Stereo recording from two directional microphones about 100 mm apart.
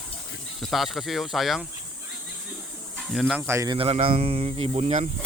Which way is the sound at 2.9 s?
Centre (ahead or behind).